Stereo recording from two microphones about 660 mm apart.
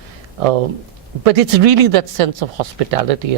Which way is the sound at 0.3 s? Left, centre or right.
Right.